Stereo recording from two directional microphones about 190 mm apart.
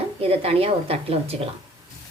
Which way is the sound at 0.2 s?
30° right (ahead or behind).